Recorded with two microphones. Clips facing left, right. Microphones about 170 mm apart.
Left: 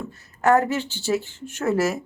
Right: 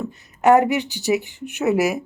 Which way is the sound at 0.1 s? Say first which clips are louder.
Right 4 dB; 20° right (ahead or behind).